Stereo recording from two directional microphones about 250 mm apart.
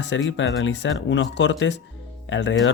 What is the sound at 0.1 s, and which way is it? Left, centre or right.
Speech, left.